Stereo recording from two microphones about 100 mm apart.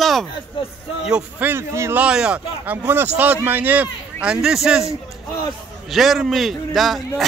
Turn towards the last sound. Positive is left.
turn(degrees=0)  # may be behind; listen again after turning